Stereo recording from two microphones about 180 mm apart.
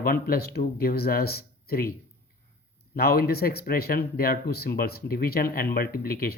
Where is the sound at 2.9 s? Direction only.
60° left (ahead or behind).